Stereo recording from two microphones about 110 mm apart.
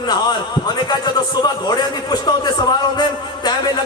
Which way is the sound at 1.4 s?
40° left (ahead or behind).